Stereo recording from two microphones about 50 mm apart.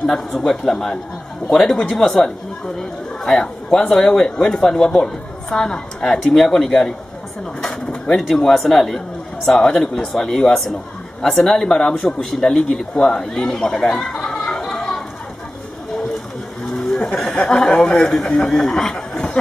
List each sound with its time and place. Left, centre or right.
0.0 s speech: centre
7.6 s pigeon: centre
8.3 s speech: centre
14.6 s a sound: centre
16.6 s a sound: centre
17.3 s speech: centre